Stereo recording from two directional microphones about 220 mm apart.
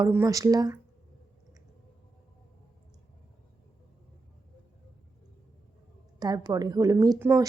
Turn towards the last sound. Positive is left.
turn(degrees=-10)  # may be behind; listen again after turning